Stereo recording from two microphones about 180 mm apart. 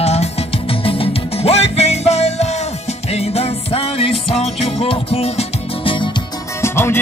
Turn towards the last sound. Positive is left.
turn(degrees=15)  # may be behind; listen again after turning